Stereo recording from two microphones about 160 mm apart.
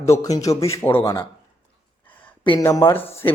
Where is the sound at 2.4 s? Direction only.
30° left (ahead or behind).